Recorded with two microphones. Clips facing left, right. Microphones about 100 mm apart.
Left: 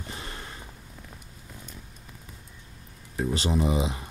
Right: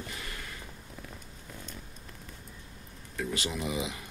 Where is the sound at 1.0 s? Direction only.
5° left (ahead or behind).